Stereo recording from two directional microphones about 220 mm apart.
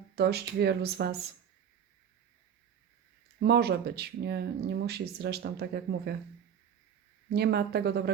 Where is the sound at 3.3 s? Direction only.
45° right (ahead or behind).